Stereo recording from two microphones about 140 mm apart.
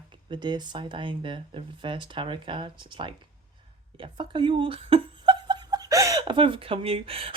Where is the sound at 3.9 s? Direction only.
35° right (ahead or behind).